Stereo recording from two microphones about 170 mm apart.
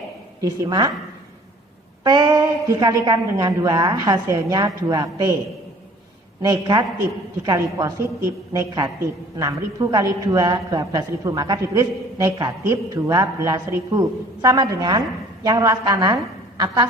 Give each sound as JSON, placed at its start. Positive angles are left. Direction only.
{"t": 0.4, "sound": "a woman's voice", "side_deg": -20}
{"t": 2.0, "sound": "a woman's voice", "side_deg": -20}
{"t": 6.4, "sound": "a woman's voice", "side_deg": -25}